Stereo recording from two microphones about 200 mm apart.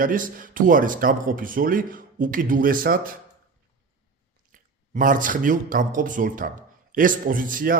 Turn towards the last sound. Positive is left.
turn(degrees=-45)  # may be behind; listen again after turning